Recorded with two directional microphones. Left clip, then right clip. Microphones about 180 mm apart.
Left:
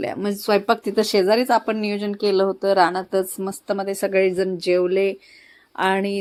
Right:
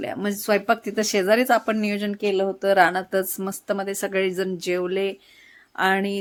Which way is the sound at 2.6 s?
Centre (ahead or behind).